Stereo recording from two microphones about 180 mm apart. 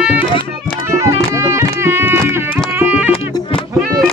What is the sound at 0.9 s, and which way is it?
Music, 15° right (ahead or behind).